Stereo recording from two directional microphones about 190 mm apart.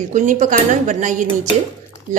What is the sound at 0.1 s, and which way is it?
A woman's voice, 40° right (ahead or behind).